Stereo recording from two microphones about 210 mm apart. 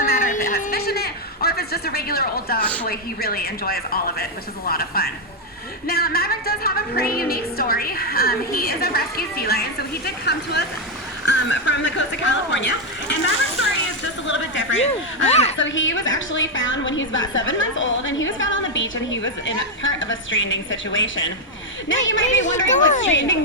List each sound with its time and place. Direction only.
0.0 s a sound: 40° left (ahead or behind)
2.8 s a woman's voice: 45° left (ahead or behind); by 12.6 s 60° left (ahead or behind)
14.3 s a woman's voice: 60° left (ahead or behind)
15.3 s a woman's voice: 30° left (ahead or behind)
15.5 s a woman's voice: 65° left (ahead or behind)